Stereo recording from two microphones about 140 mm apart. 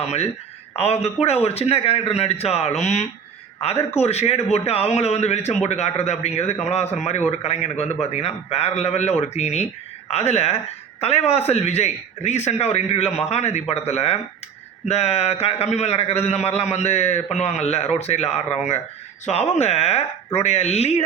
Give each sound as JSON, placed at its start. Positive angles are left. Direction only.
{"t": 0.0, "sound": "a man's voice", "side_deg": 50}